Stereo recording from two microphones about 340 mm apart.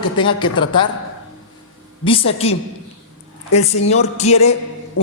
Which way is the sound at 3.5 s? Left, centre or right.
Centre.